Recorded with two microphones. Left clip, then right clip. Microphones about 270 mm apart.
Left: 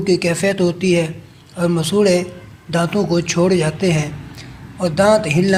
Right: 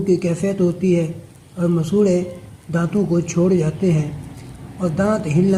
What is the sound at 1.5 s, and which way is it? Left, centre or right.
Speech, centre.